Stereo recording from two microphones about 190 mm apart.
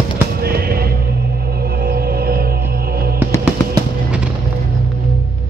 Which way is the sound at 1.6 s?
55° right (ahead or behind).